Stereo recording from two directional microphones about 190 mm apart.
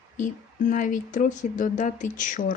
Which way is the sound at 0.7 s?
45° left (ahead or behind).